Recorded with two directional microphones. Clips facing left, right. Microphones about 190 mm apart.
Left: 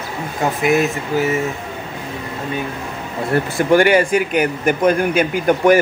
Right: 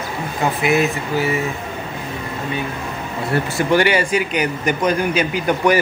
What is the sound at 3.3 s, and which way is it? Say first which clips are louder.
Speech: left 3 dB; 50° left (ahead or behind).